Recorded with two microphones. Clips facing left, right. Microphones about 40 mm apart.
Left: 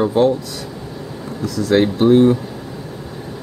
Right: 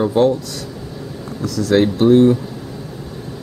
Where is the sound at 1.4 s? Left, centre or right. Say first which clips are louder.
Even; centre.